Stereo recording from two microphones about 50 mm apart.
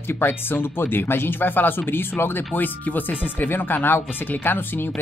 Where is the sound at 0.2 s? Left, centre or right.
Left.